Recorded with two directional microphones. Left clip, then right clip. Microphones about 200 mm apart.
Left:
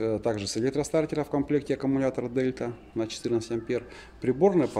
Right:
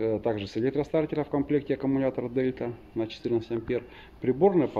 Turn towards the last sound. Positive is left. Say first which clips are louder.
# even
turn(degrees=10)  # may be behind; listen again after turning